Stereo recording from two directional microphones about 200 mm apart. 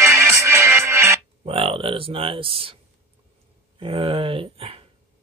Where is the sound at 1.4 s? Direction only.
30° right (ahead or behind).